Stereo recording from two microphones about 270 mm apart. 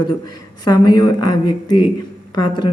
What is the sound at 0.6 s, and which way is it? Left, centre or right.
Speech, centre.